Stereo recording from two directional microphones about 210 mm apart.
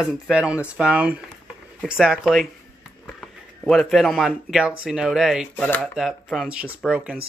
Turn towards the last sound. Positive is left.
turn(degrees=-5)  # may be behind; listen again after turning